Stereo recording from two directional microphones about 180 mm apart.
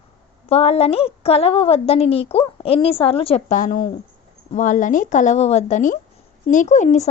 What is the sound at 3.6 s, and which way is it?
A woman's voice, 50° left (ahead or behind).